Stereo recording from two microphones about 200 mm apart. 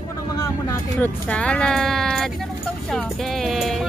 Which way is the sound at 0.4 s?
10° left (ahead or behind).